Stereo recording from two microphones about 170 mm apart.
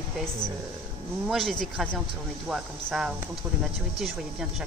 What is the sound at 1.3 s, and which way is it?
Speech, centre (ahead or behind).